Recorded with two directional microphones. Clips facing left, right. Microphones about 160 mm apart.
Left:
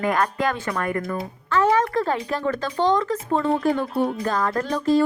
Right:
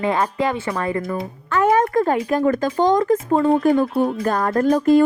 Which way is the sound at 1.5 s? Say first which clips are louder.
Right 3 dB; 50° right (ahead or behind).